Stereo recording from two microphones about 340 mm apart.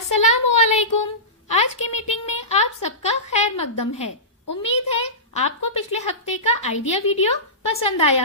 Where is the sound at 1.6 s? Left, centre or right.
Centre.